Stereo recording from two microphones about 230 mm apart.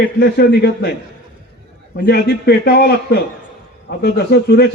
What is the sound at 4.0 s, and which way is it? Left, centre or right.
Speech, left.